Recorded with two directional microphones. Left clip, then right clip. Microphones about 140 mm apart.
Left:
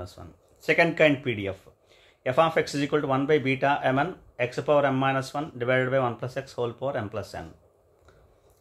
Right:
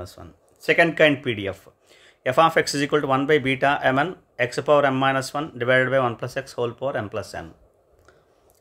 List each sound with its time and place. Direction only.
0.0 s speech: 25° right (ahead or behind)